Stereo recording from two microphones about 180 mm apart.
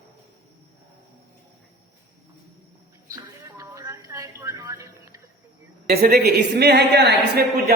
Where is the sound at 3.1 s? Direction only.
15° right (ahead or behind).